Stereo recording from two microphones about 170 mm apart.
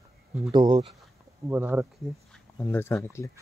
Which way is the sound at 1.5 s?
10° right (ahead or behind).